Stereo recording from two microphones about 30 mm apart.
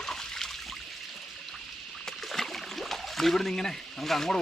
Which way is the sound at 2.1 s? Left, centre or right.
Centre.